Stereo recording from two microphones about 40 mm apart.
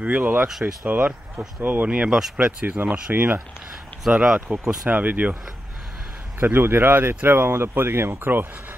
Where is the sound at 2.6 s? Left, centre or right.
Right.